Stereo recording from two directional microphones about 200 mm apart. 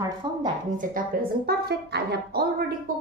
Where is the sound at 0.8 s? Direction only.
45° right (ahead or behind).